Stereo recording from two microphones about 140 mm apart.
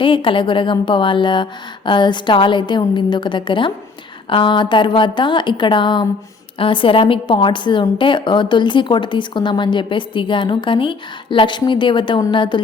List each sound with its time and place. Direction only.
0.0 s a woman's voice: 35° left (ahead or behind)